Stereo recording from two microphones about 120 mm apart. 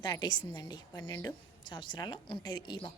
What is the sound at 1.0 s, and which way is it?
Speech, 20° left (ahead or behind).